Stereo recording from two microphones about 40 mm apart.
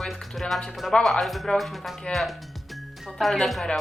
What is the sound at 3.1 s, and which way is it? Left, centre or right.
Speech, centre.